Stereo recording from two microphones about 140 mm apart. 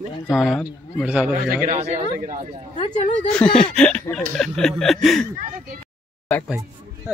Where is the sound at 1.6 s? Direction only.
65° right (ahead or behind).